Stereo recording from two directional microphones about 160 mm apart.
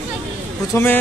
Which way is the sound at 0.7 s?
15° left (ahead or behind).